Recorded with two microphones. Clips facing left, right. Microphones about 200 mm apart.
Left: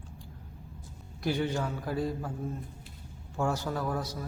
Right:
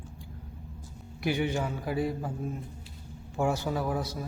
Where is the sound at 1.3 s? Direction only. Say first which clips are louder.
Right 1 dB; 10° right (ahead or behind).